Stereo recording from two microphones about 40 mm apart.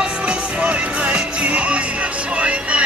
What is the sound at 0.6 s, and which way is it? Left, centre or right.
Music, right.